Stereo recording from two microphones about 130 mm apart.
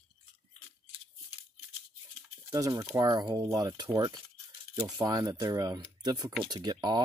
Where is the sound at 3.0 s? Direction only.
30° right (ahead or behind).